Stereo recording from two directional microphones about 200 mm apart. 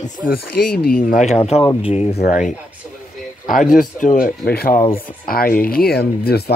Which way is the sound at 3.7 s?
40° left (ahead or behind).